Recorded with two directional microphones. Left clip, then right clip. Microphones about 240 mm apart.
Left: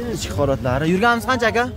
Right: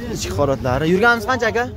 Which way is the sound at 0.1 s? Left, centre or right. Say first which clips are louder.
Right 2 dB; centre.